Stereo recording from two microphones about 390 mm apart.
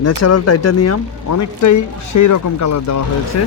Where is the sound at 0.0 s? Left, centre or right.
Left.